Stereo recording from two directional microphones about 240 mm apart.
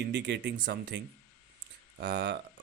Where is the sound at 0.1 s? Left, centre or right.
Right.